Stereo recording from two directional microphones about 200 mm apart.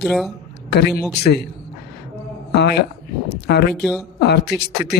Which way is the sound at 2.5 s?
55° left (ahead or behind).